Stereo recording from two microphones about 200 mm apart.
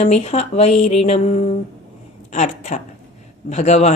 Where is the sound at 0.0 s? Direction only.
30° left (ahead or behind).